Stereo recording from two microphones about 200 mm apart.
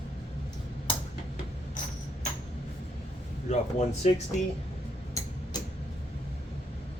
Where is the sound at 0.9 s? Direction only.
25° left (ahead or behind).